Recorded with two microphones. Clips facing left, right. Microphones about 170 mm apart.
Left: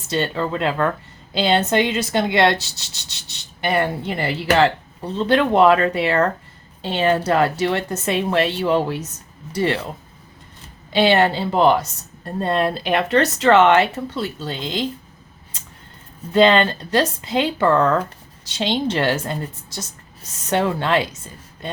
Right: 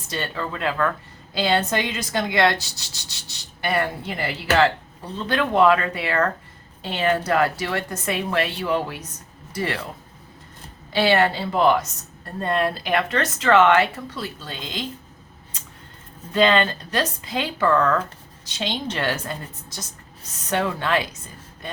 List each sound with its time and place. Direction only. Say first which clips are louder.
0.1 s speech: left 7 dB; 25° left (ahead or behind)
10.9 s speech: left 3 dB; 20° left (ahead or behind)
16.3 s speech: left 4 dB; 30° left (ahead or behind)